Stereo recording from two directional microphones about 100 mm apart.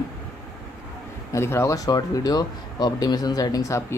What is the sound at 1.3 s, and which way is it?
Speech, 25° left (ahead or behind).